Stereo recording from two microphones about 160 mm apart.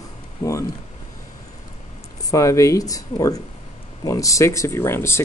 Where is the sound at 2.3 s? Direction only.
20° left (ahead or behind).